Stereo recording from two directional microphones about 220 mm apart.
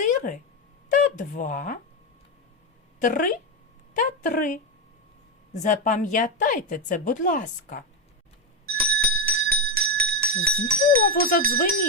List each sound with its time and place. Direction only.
0.0 s a sound: 35° left (ahead or behind)
0.9 s a woman's voice: 35° left (ahead or behind)
3.0 s a woman's voice: 35° left (ahead or behind)
5.6 s a woman's voice: 35° left (ahead or behind)
8.6 s bell: 45° right (ahead or behind)
11.1 s a woman's voice: 40° left (ahead or behind)